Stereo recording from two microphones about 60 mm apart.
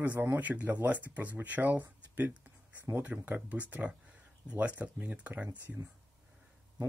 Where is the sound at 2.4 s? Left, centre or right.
Right.